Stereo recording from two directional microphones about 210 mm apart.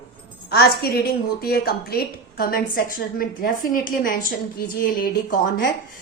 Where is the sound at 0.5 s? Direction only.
50° left (ahead or behind).